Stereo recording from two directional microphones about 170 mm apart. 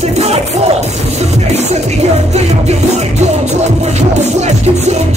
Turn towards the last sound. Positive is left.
turn(degrees=-40)  # may be behind; listen again after turning